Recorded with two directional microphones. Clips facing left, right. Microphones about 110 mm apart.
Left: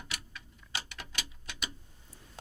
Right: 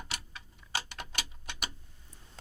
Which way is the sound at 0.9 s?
55° right (ahead or behind).